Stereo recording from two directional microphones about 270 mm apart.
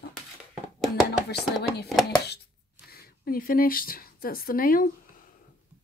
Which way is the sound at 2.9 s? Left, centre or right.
Left.